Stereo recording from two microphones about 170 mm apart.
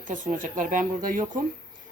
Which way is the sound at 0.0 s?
50° right (ahead or behind).